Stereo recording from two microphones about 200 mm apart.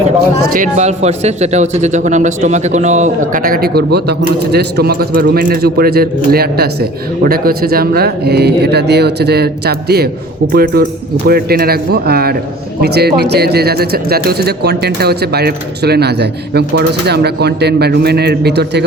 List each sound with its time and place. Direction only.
0.2 s speech: 45° right (ahead or behind)